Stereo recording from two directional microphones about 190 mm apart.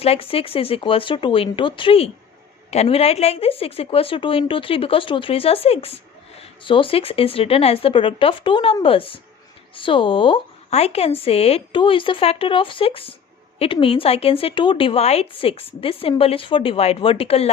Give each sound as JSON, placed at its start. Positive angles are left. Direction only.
{"t": 0.0, "sound": "a woman's voice", "side_deg": 30}